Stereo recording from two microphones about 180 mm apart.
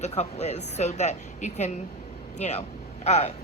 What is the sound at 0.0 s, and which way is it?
Speech, 40° left (ahead or behind).